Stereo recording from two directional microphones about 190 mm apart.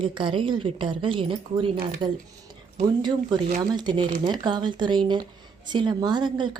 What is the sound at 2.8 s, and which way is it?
A woman's voice, 25° right (ahead or behind).